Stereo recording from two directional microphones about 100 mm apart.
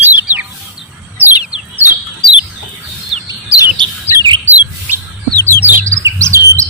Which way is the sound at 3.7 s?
50° right (ahead or behind).